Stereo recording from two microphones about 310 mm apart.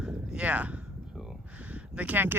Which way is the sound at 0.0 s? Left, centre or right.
Centre.